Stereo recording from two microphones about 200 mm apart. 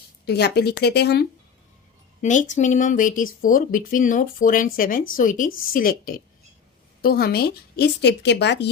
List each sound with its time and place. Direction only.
0.3 s a woman's voice: 55° left (ahead or behind)
2.2 s a woman's voice: 40° left (ahead or behind); by 8.7 s 60° left (ahead or behind)